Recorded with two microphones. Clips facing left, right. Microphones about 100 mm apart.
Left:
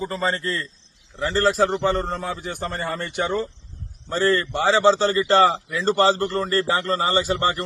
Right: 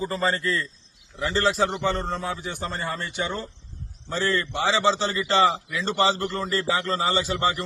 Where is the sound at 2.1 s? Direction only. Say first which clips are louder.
Left 1 dB; 60° left (ahead or behind).